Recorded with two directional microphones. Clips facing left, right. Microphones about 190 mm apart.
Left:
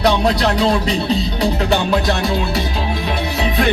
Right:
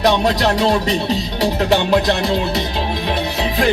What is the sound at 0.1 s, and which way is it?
Music, 25° right (ahead or behind).